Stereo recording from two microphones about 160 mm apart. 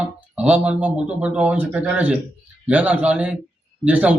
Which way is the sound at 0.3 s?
10° right (ahead or behind).